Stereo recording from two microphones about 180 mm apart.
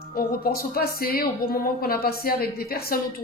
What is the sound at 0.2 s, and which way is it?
Speech, 55° left (ahead or behind).